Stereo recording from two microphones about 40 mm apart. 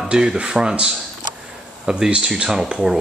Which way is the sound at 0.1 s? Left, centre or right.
Right.